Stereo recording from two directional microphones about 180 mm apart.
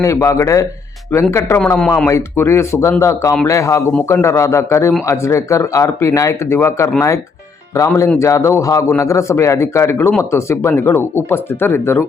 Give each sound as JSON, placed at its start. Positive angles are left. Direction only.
{"t": 0.0, "sound": "speech", "side_deg": 15}